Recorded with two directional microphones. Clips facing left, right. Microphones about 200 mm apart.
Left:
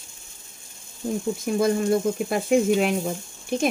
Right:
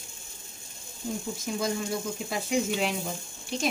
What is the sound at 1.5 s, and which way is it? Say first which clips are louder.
Speech: left 9 dB; 55° left (ahead or behind).